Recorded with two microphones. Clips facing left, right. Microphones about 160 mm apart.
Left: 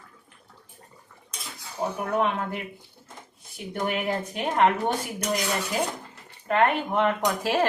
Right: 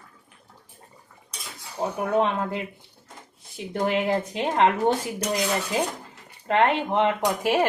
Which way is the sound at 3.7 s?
30° right (ahead or behind).